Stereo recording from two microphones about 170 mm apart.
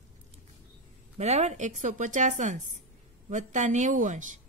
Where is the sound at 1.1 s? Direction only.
40° right (ahead or behind).